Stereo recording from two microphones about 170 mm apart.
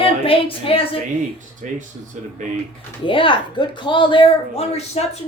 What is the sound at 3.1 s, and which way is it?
Speech, 30° left (ahead or behind).